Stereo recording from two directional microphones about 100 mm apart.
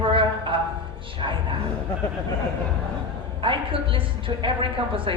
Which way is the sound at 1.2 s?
55° right (ahead or behind).